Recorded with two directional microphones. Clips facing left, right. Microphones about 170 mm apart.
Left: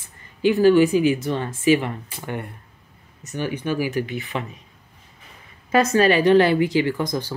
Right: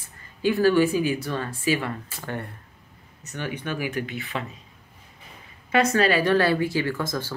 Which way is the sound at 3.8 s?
40° left (ahead or behind).